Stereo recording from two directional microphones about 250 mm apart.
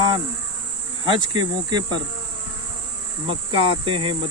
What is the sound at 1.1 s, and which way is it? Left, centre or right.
Cricket, centre.